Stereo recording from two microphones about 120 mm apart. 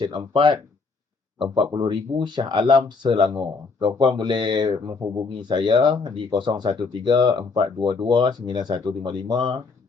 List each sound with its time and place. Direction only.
0.3 s speech: 40° right (ahead or behind)